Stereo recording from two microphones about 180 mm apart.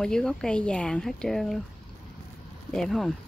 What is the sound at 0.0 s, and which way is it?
Speech, 5° left (ahead or behind).